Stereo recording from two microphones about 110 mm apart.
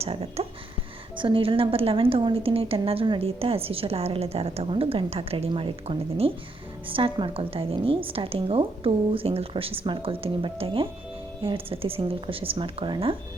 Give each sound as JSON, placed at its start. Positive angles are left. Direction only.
{"t": 0.0, "sound": "speech", "side_deg": -65}
{"t": 1.1, "sound": "a woman's voice", "side_deg": -50}